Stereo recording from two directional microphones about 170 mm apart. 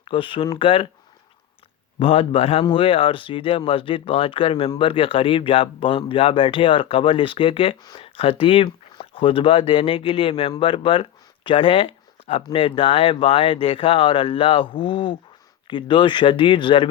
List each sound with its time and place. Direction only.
0.0 s speech: 30° left (ahead or behind)
2.0 s speech: 30° left (ahead or behind)